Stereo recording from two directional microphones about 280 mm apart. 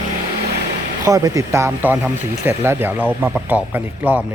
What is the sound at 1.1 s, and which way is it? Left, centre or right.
Speech, centre.